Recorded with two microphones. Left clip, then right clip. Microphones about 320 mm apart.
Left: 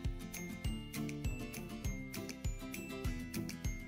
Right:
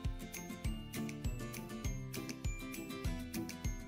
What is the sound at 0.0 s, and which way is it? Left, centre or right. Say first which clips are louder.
Music: left 1 dB; centre.